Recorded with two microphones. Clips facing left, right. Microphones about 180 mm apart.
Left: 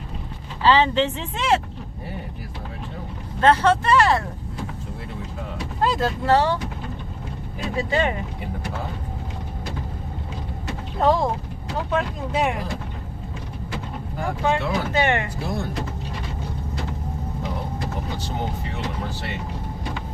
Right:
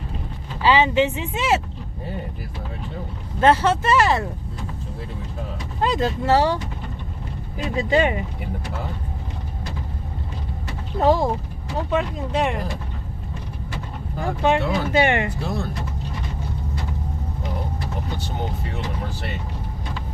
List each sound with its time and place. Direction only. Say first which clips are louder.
0.6 s speech: right 1 dB; 10° right (ahead or behind)
3.4 s speech: even; 10° right (ahead or behind)
5.8 s speech: right 1 dB; centre (ahead or behind)
7.8 s speech: right 3 dB; 15° right (ahead or behind)
11.0 s speech: right 1 dB; centre (ahead or behind)
14.4 s speech: right 3 dB; 15° right (ahead or behind)